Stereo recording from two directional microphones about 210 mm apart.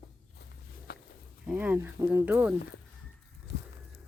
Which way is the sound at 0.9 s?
50° left (ahead or behind).